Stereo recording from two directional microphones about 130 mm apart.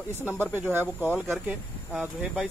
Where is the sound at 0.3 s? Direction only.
15° left (ahead or behind).